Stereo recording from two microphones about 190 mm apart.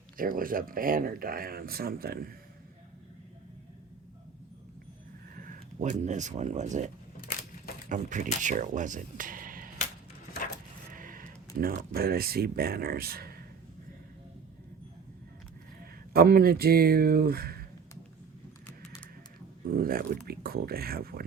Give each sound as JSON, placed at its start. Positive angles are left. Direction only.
{"t": 0.2, "sound": "speech", "side_deg": -45}
{"t": 5.4, "sound": "speech", "side_deg": -40}
{"t": 10.9, "sound": "speech", "side_deg": -45}
{"t": 15.8, "sound": "speech", "side_deg": -50}
{"t": 19.6, "sound": "speech", "side_deg": -50}